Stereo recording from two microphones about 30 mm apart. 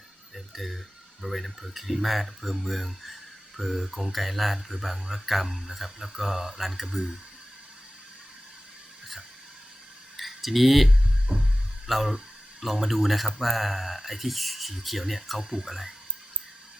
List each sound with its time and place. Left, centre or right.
0.3 s a sound: centre
1.2 s speech: centre
6.8 s speech: right
10.2 s tick: centre
11.3 s a sound: right
11.9 s speech: centre
15.4 s speech: centre